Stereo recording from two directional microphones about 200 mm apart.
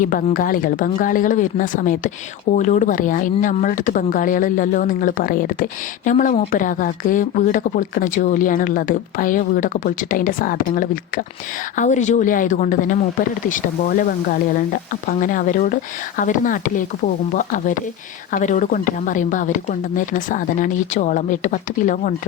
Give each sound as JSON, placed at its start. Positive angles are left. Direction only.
{"t": 0.0, "sound": "speech", "side_deg": 45}